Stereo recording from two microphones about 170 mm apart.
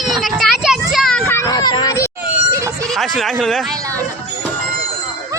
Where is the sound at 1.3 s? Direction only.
20° left (ahead or behind).